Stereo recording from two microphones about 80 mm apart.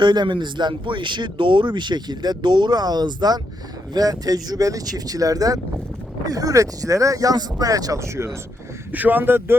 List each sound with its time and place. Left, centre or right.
0.0 s speech: right
8.0 s speech: right
8.9 s speech: right